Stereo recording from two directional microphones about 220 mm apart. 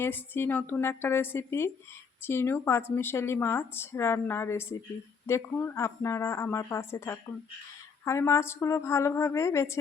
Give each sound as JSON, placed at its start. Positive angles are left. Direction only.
{"t": 0.0, "sound": "a woman's voice", "side_deg": 10}